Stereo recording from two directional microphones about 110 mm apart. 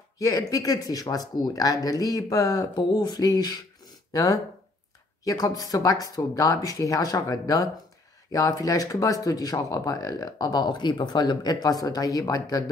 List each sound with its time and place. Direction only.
0.2 s speech: 35° left (ahead or behind)